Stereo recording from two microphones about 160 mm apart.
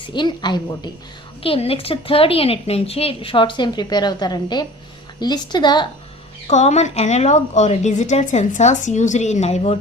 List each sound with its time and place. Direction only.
0.1 s a woman's voice: 30° left (ahead or behind)
6.5 s a woman's voice: 45° left (ahead or behind)